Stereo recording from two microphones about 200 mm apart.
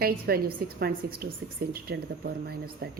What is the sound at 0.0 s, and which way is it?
Speech, 50° right (ahead or behind).